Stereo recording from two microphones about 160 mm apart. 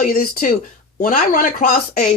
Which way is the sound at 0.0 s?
65° left (ahead or behind).